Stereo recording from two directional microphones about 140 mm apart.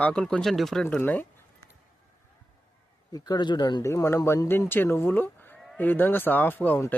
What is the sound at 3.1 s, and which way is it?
Speech, 30° left (ahead or behind).